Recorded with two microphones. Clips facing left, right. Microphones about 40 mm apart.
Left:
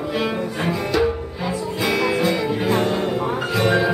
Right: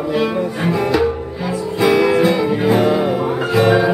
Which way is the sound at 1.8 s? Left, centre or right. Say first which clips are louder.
Right 7 dB; centre.